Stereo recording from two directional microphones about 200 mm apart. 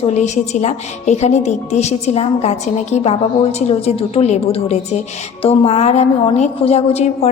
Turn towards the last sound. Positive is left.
turn(degrees=30)  # may be behind; listen again after turning